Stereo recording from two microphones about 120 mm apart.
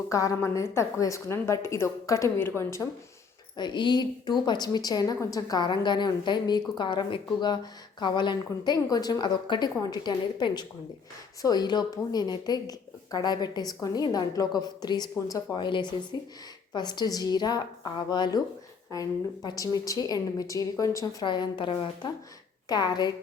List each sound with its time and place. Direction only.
0.1 s a woman's voice: 25° left (ahead or behind)
3.6 s a woman's voice: 40° left (ahead or behind)
21.2 s a woman's voice: 40° left (ahead or behind)